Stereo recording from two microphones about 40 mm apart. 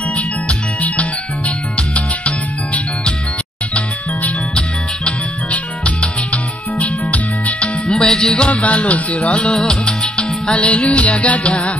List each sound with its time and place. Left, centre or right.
0.1 s music: left
5.5 s music: left
8.1 s music: centre
8.5 s music: left
9.6 s music: centre